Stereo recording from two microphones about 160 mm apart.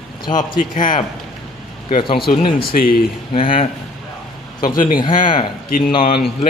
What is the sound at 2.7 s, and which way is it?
Speech, 65° left (ahead or behind).